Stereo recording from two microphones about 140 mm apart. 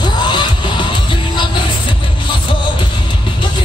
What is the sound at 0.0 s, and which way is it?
Music, 35° left (ahead or behind).